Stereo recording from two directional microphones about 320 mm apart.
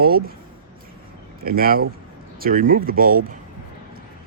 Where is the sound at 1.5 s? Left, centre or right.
Right.